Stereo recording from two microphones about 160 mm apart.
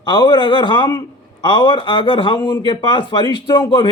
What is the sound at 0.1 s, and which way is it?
A man's voice, 25° left (ahead or behind).